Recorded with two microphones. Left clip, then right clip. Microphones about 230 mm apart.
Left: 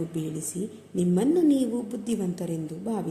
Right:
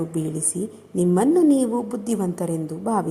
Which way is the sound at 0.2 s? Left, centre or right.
Centre.